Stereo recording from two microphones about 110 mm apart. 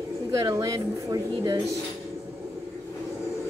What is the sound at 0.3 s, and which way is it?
A woman's voice, 30° right (ahead or behind).